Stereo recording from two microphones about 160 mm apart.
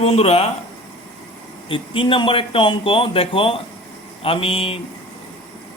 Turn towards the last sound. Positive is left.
turn(degrees=35)  # may be behind; listen again after turning